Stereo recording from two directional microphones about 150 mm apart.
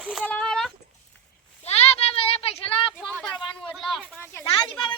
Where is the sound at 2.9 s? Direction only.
5° left (ahead or behind).